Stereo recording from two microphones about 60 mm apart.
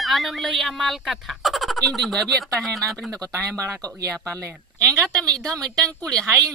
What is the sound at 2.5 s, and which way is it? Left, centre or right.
Speech, centre.